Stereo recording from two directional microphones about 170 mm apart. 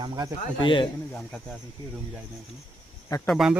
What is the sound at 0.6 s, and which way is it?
Speech, 30° left (ahead or behind).